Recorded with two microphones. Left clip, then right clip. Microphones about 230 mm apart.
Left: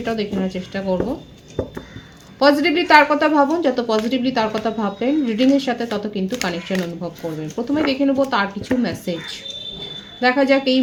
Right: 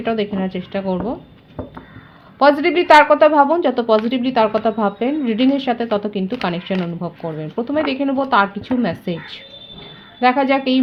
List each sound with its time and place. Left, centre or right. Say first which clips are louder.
0.0 s a woman's voice: right 2 dB; right
2.4 s a woman's voice: right 2 dB; right